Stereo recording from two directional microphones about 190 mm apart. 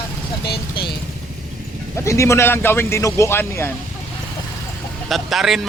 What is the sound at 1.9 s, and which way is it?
Speech, 15° left (ahead or behind).